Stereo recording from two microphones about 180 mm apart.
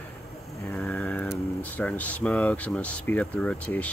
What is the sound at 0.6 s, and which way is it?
Speech, 10° left (ahead or behind).